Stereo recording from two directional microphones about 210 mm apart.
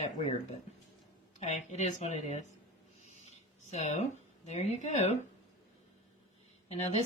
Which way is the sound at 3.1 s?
30° left (ahead or behind).